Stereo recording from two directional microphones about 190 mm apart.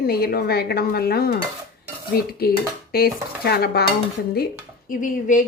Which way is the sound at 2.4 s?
55° left (ahead or behind).